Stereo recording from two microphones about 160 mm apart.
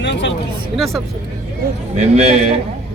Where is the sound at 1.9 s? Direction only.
40° right (ahead or behind).